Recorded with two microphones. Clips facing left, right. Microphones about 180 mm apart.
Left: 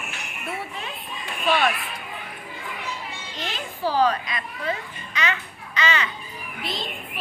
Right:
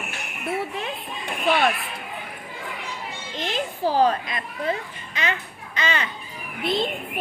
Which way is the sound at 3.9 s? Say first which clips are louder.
Right 1 dB; 45° right (ahead or behind).